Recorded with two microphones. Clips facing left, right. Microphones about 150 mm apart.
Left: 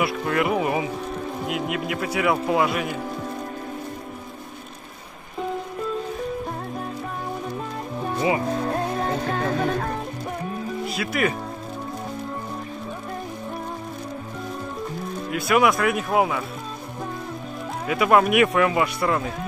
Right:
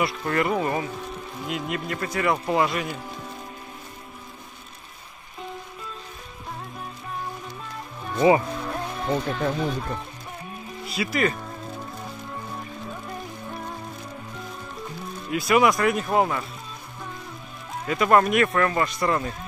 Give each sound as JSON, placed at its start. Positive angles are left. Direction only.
{"t": 0.0, "sound": "speech", "side_deg": 0}
{"t": 8.5, "sound": "music", "side_deg": 40}
{"t": 8.9, "sound": "music", "side_deg": 50}
{"t": 10.9, "sound": "speech", "side_deg": 0}
{"t": 15.3, "sound": "speech", "side_deg": 0}
{"t": 17.8, "sound": "speech", "side_deg": 5}